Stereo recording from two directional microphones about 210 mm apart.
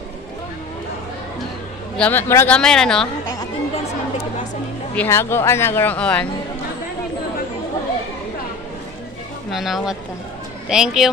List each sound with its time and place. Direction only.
2.0 s speech: 10° left (ahead or behind)
3.3 s chatter: 25° left (ahead or behind)
4.9 s speech: 10° left (ahead or behind)
9.5 s speech: centre (ahead or behind)